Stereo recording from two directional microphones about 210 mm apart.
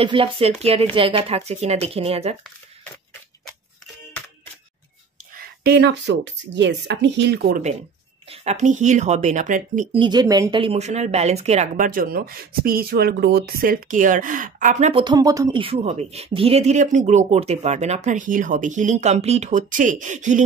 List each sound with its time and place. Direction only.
0.0 s speech: 25° right (ahead or behind)
5.6 s speech: 50° right (ahead or behind); by 9.8 s 35° right (ahead or behind)
9.9 s speech: 20° right (ahead or behind); by 20.4 s 35° right (ahead or behind)